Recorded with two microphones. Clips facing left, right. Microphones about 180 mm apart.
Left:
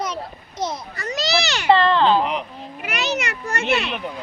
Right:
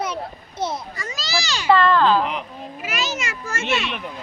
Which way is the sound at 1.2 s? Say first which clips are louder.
Left 5 dB; 70° left (ahead or behind).